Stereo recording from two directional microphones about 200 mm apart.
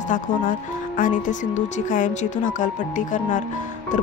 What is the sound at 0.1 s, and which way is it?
Speech, 40° left (ahead or behind).